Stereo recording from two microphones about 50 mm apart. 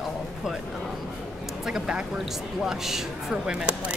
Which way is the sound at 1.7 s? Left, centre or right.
Centre.